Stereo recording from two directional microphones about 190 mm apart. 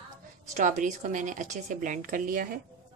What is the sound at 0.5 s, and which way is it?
Speech, 40° right (ahead or behind).